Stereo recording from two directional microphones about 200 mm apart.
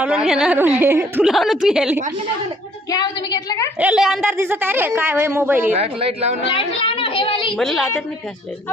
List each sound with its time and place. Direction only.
0.0 s a woman's voice: 5° right (ahead or behind)
3.3 s a sound: 20° left (ahead or behind)
3.8 s a woman's voice: 5° right (ahead or behind)
5.7 s a woman's voice: 30° right (ahead or behind)
6.5 s a woman's voice: 25° left (ahead or behind)
7.5 s a woman's voice: centre (ahead or behind)